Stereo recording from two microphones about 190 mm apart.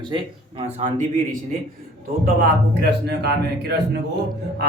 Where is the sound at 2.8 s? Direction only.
60° right (ahead or behind).